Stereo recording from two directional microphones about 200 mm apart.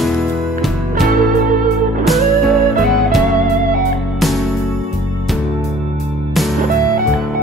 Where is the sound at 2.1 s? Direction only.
Centre (ahead or behind).